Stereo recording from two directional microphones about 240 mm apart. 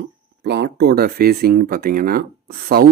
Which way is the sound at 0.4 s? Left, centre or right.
Right.